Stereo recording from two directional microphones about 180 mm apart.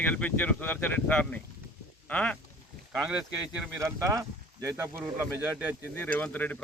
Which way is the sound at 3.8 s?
15° right (ahead or behind).